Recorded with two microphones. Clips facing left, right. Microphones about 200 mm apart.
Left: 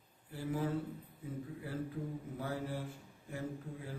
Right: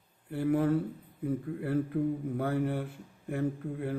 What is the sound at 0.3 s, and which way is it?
Speech, 60° right (ahead or behind).